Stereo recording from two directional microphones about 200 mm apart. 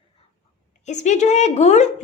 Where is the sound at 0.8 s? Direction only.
35° left (ahead or behind).